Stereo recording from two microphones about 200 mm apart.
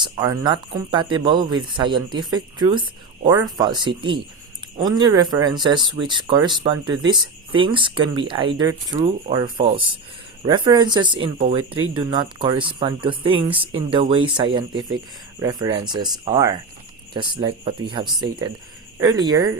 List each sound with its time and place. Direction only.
0.0 s speech: 20° right (ahead or behind)